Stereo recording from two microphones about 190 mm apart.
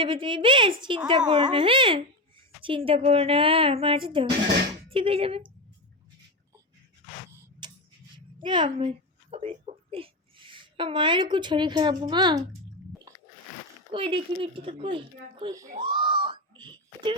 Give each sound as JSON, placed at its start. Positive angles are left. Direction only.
{"t": 0.0, "sound": "speech", "side_deg": -25}
{"t": 7.6, "sound": "tick-tock", "side_deg": -25}
{"t": 8.4, "sound": "a sound", "side_deg": -25}
{"t": 12.0, "sound": "speech", "side_deg": -25}
{"t": 13.9, "sound": "speech", "side_deg": -30}
{"t": 15.8, "sound": "wail", "side_deg": -25}